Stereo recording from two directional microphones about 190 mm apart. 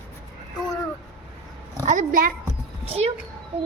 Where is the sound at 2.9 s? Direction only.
30° right (ahead or behind).